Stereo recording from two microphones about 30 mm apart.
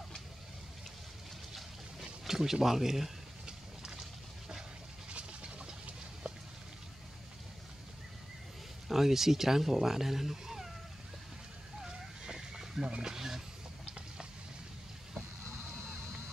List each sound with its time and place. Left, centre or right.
2.2 s speech: centre
3.4 s horse: right
5.1 s a sound: right
8.8 s speech: centre
11.8 s a sound: centre
12.8 s speech: right